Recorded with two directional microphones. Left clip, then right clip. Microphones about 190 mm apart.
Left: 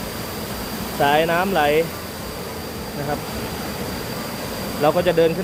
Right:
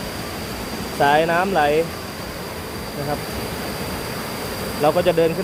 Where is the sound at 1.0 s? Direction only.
Centre (ahead or behind).